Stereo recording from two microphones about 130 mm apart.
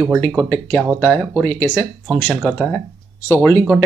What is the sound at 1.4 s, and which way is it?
Speech, 10° left (ahead or behind).